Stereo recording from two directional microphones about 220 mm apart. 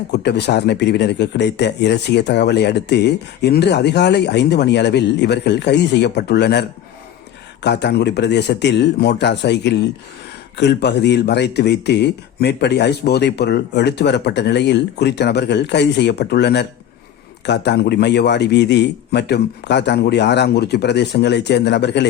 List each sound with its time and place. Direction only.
0.1 s speech: 50° left (ahead or behind)